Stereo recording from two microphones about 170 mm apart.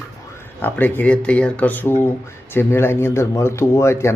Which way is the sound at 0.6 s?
10° left (ahead or behind).